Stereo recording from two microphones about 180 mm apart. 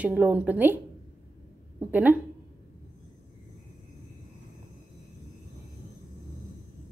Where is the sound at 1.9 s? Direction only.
10° right (ahead or behind).